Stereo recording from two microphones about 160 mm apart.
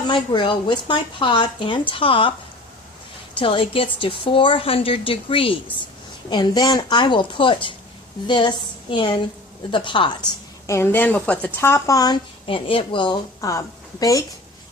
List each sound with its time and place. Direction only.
0.1 s a woman's voice: 30° left (ahead or behind)
3.3 s a woman's voice: 35° left (ahead or behind)
10.7 s speech: 15° left (ahead or behind)